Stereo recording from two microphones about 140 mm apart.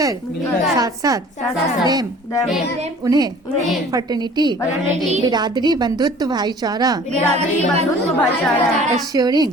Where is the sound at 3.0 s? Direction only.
25° right (ahead or behind).